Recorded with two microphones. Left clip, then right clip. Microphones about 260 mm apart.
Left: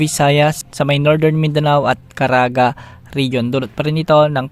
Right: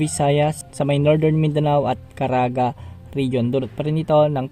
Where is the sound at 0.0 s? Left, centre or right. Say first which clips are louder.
Left 6 dB; left.